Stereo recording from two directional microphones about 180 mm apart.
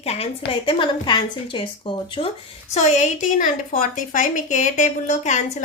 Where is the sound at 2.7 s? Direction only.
40° left (ahead or behind).